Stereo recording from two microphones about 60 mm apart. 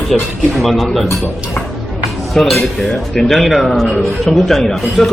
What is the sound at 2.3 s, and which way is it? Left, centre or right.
Speech, centre.